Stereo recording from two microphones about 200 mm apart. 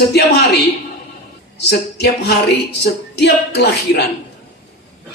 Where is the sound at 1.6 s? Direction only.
55° left (ahead or behind).